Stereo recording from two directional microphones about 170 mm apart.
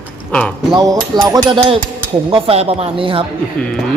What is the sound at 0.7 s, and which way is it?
Speech, 20° right (ahead or behind).